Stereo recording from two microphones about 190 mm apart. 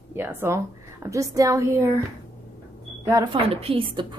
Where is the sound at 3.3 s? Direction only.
30° right (ahead or behind).